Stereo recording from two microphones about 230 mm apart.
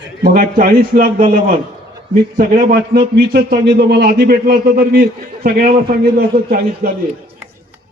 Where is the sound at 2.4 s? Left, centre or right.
Right.